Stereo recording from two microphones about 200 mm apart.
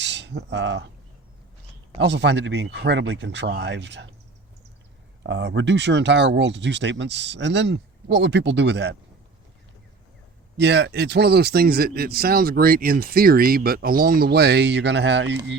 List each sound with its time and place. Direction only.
0.0 s speech: 60° right (ahead or behind)
2.0 s speech: 60° right (ahead or behind)
5.2 s speech: 60° right (ahead or behind)
10.6 s speech: 60° right (ahead or behind)